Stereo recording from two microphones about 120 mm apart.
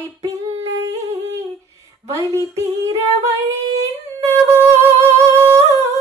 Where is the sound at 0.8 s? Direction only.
25° right (ahead or behind).